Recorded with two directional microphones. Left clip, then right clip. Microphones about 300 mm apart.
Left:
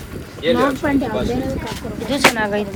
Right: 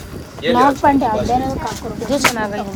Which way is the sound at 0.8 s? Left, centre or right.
Right.